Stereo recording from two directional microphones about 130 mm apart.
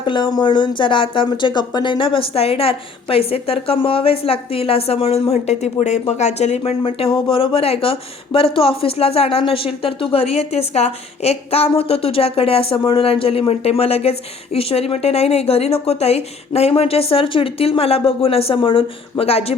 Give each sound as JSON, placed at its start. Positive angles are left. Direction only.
{"t": 0.0, "sound": "speech", "side_deg": 35}
{"t": 6.6, "sound": "speech", "side_deg": 45}